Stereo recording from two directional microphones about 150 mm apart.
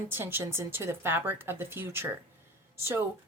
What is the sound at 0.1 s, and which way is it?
Speech, 15° right (ahead or behind).